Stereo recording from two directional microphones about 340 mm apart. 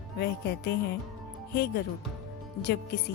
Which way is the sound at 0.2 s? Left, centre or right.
Left.